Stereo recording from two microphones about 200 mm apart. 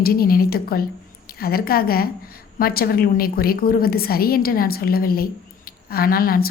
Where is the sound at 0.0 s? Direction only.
50° left (ahead or behind).